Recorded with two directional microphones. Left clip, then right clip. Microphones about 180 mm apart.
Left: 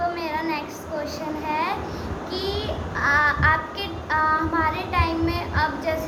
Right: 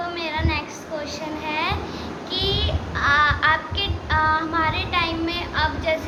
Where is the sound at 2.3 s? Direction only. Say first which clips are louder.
Right 5 dB; 20° left (ahead or behind).